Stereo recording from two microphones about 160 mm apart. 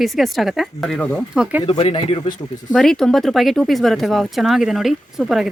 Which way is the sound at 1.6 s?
35° left (ahead or behind).